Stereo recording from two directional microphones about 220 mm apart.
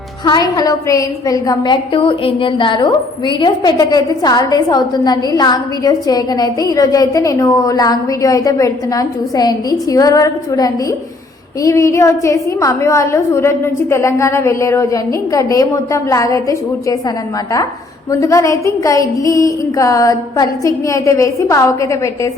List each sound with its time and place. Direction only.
0.3 s a woman's voice: 15° left (ahead or behind)
18.1 s a woman's voice: 15° left (ahead or behind)